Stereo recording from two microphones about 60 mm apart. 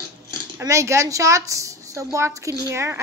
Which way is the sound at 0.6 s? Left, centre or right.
Right.